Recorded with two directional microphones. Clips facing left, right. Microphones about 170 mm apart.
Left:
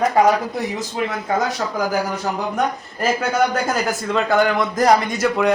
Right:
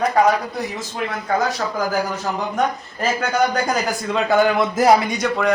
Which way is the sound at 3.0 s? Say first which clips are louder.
Left 1 dB; 5° left (ahead or behind).